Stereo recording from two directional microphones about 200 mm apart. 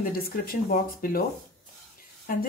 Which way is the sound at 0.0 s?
45° left (ahead or behind).